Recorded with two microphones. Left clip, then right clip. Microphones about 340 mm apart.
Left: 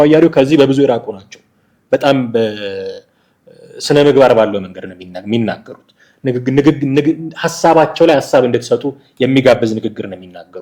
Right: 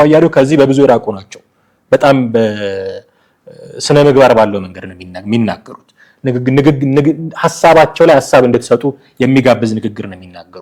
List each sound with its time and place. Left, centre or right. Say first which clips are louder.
0.0 s speech: right 1 dB; right
1.9 s a man's voice: right 3 dB; right